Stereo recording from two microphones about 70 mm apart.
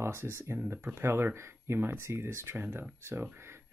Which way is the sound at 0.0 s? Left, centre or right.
Right.